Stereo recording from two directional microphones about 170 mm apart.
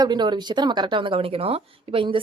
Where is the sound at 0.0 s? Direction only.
25° right (ahead or behind).